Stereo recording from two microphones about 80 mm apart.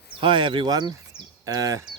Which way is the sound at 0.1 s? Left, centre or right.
Right.